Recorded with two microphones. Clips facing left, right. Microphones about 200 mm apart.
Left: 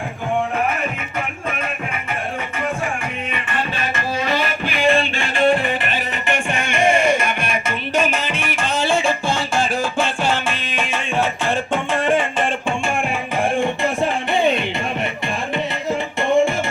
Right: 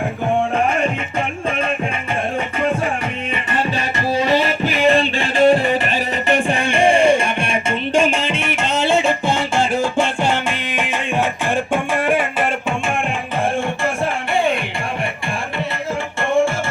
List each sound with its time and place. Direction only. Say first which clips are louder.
4.3 s music: right 5 dB; 35° right (ahead or behind); by 12.5 s 10° right (ahead or behind)
13.6 s music: left 1 dB; 20° left (ahead or behind)